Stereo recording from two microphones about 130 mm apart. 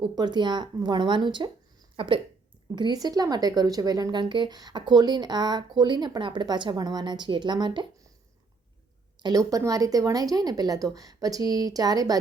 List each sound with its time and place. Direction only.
0.0 s a woman's voice: 35° right (ahead or behind)
9.5 s a woman's voice: 25° right (ahead or behind)